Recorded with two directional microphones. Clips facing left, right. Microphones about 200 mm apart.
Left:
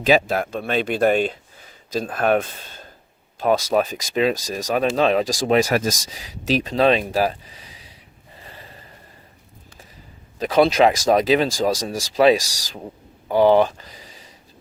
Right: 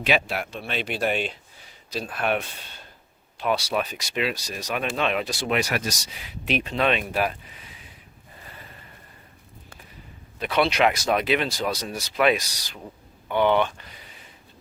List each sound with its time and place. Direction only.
0.0 s speech: 45° left (ahead or behind)
8.4 s a sound: 30° left (ahead or behind)
10.4 s speech: 40° left (ahead or behind)
12.1 s speech: 30° left (ahead or behind)